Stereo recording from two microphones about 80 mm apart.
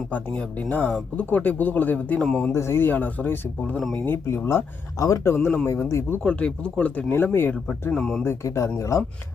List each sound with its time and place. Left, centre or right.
0.3 s speech: centre
2.4 s speech: left
3.8 s speech: centre
4.0 s speech: left
4.9 s speech: left
6.2 s speech: centre; by 7.8 s left
7.9 s speech: centre
8.2 s speech: left